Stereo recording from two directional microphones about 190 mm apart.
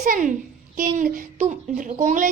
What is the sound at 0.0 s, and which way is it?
A woman's voice, 45° right (ahead or behind).